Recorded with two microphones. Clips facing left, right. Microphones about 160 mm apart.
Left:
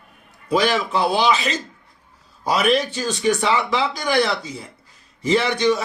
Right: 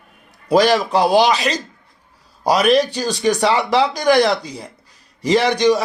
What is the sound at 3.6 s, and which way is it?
Speech, 80° right.